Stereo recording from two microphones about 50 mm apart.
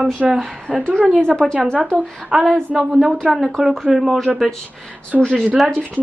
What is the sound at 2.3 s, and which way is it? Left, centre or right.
A woman's voice, centre.